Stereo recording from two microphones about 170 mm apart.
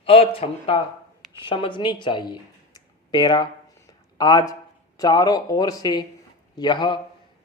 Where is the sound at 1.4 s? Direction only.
30° left (ahead or behind).